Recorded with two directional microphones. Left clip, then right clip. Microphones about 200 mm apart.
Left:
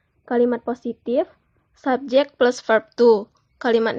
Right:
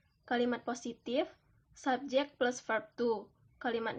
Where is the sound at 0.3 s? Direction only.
30° left (ahead or behind).